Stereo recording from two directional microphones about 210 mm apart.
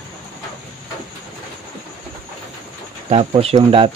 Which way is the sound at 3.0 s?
30° right (ahead or behind).